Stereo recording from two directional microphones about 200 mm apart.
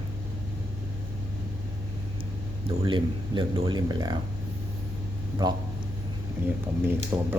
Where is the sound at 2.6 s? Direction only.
25° right (ahead or behind).